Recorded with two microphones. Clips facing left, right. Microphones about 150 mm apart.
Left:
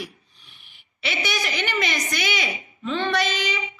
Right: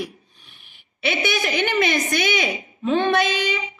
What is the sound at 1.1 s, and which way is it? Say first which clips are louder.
A woman's voice: right 5 dB; 55° right (ahead or behind).